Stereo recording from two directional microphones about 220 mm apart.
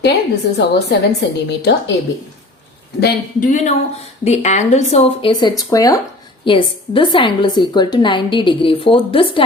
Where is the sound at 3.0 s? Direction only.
35° left (ahead or behind).